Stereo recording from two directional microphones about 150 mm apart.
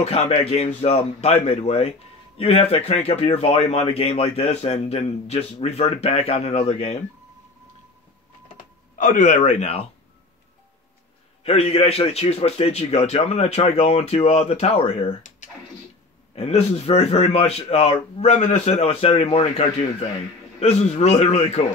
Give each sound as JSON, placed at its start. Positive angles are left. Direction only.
{"t": 0.0, "sound": "a man's voice", "side_deg": 45}
{"t": 8.9, "sound": "a man's voice", "side_deg": 60}
{"t": 11.4, "sound": "a man's voice", "side_deg": 45}
{"t": 16.3, "sound": "a man's voice", "side_deg": 40}